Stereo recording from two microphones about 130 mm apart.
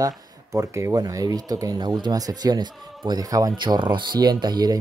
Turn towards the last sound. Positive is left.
turn(degrees=-30)  # may be behind; listen again after turning